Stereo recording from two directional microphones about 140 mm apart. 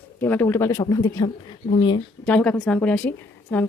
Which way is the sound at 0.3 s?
15° left (ahead or behind).